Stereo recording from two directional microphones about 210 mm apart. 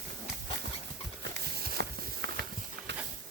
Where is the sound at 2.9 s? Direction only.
55° right (ahead or behind).